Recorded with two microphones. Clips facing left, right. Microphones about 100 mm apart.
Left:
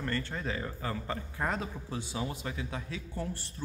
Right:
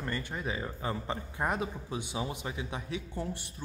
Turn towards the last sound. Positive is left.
turn(degrees=-15)  # may be behind; listen again after turning